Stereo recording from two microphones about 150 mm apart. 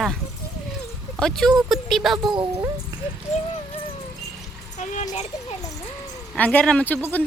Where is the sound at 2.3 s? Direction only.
30° right (ahead or behind).